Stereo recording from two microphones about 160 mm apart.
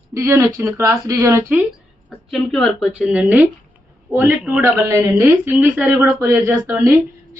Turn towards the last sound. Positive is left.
turn(degrees=-15)  # may be behind; listen again after turning